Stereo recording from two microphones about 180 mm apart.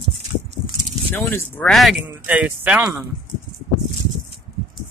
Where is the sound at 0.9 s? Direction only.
10° left (ahead or behind); by 3.0 s 5° right (ahead or behind).